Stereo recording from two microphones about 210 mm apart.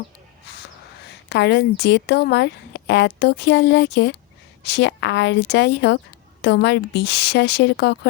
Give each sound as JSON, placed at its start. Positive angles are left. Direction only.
{"t": 1.3, "sound": "a woman's voice", "side_deg": 55}